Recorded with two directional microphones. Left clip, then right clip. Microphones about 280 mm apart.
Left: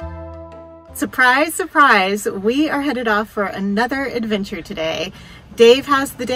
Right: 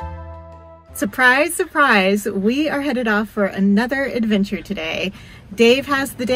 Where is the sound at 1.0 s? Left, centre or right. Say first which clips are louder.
Even; centre.